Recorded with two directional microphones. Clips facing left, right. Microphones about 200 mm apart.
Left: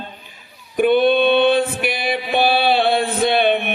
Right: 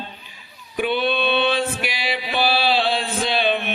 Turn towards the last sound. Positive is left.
turn(degrees=55)  # may be behind; listen again after turning